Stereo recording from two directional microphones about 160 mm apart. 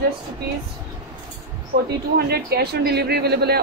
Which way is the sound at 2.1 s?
80° right.